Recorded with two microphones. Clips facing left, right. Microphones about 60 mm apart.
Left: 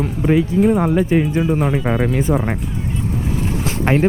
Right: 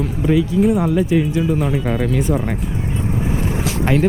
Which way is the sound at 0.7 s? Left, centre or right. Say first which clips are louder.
Left 1 dB; left.